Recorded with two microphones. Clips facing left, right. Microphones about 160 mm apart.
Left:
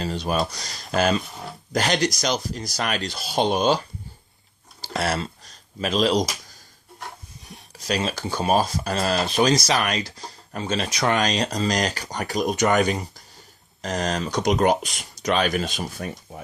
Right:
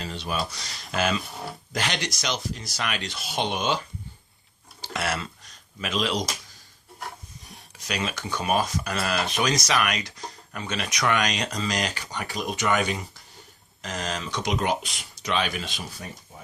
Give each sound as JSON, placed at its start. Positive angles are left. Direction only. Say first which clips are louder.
{"t": 0.0, "sound": "speech", "louder": "left 6 dB", "side_deg": 40}
{"t": 4.8, "sound": "a sound", "louder": "left 4 dB", "side_deg": 35}
{"t": 7.8, "sound": "speech", "louder": "left 5 dB", "side_deg": 35}